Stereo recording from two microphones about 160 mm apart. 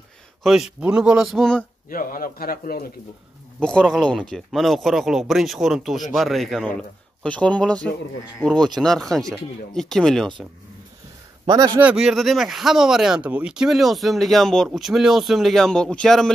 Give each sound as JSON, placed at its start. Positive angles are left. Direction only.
{"t": 0.4, "sound": "speech", "side_deg": 0}
{"t": 1.9, "sound": "a man's voice", "side_deg": 60}
{"t": 3.5, "sound": "speech", "side_deg": 5}
{"t": 11.4, "sound": "a man's voice", "side_deg": -25}
{"t": 11.8, "sound": "speech", "side_deg": -5}